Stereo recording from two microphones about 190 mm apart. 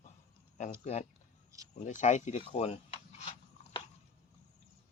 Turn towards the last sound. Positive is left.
turn(degrees=35)  # may be behind; listen again after turning